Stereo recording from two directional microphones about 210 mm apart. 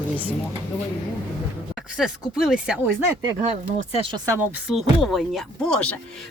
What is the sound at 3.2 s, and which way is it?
Speech, 30° right (ahead or behind).